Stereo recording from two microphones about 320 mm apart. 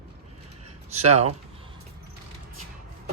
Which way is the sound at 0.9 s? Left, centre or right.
Centre.